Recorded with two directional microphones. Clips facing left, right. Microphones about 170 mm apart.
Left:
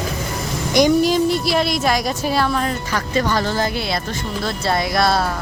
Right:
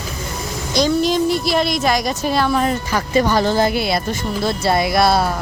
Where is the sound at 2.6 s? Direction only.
15° right (ahead or behind).